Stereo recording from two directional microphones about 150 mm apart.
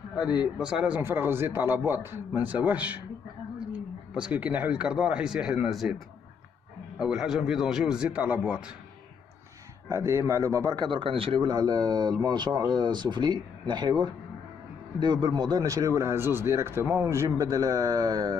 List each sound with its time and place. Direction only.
0.6 s a man's voice: 5° right (ahead or behind)
4.1 s a man's voice: 10° right (ahead or behind)
7.0 s a man's voice: 5° right (ahead or behind)
9.8 s speech: 20° right (ahead or behind)
10.9 s speech: 35° right (ahead or behind)
15.2 s speech: 30° right (ahead or behind)